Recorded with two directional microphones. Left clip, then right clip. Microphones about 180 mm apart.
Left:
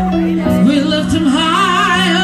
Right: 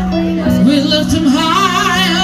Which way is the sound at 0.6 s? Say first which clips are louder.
Right 4 dB; 60° right (ahead or behind).